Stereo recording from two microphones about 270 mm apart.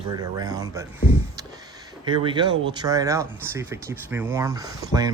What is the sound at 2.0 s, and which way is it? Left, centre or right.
Speech, centre.